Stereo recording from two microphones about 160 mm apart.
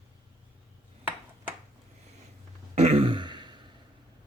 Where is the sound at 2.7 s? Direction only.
40° right (ahead or behind).